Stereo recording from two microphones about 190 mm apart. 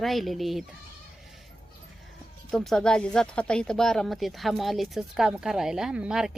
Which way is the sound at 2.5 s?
Centre (ahead or behind).